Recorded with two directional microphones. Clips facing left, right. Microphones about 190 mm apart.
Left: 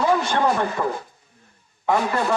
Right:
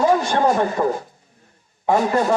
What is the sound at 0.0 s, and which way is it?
A man's voice, 45° right (ahead or behind).